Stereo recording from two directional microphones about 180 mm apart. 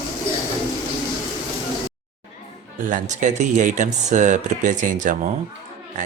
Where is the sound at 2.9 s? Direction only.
45° right (ahead or behind).